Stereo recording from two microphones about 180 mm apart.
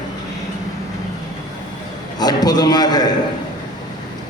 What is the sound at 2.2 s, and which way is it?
Speech, 20° left (ahead or behind).